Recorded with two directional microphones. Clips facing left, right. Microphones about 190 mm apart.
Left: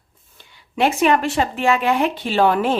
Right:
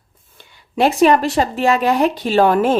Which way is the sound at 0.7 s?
35° right (ahead or behind).